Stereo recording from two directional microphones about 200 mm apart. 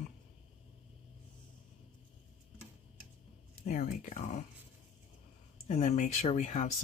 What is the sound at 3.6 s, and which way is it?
Speech, 45° left (ahead or behind).